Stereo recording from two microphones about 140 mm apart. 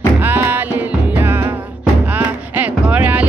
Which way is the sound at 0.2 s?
15° right (ahead or behind).